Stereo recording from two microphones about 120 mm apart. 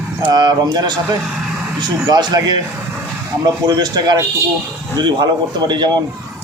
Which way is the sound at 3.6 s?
35° right (ahead or behind).